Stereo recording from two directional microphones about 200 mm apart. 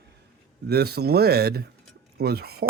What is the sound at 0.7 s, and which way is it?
Speech, 55° right (ahead or behind).